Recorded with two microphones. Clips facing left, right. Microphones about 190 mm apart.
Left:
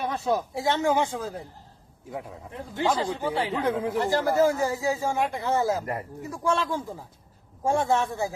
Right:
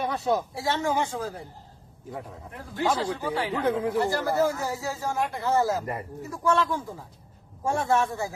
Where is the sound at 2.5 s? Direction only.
20° left (ahead or behind).